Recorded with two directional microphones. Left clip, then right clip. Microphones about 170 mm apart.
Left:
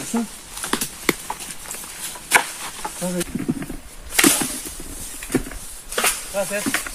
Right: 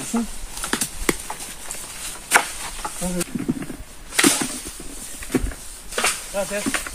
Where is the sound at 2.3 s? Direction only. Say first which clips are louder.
Left 1 dB; centre (ahead or behind).